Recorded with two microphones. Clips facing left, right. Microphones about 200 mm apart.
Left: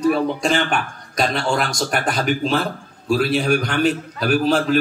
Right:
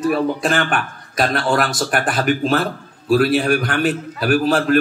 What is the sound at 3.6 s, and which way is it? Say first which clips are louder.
A man's voice: even; 5° right (ahead or behind).